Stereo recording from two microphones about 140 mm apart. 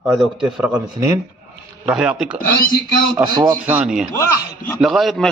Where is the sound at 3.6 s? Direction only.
5° right (ahead or behind).